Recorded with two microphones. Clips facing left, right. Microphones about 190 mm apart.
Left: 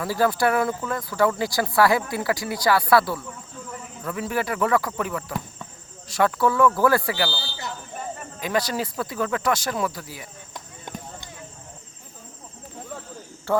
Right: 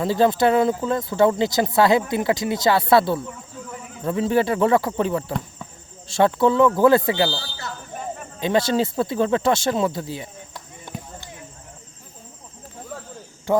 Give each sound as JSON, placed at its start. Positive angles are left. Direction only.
{"t": 0.0, "sound": "speech", "side_deg": -20}
{"t": 7.9, "sound": "cricket", "side_deg": 0}
{"t": 8.4, "sound": "speech", "side_deg": -25}
{"t": 10.5, "sound": "run", "side_deg": 15}
{"t": 13.5, "sound": "speech", "side_deg": -15}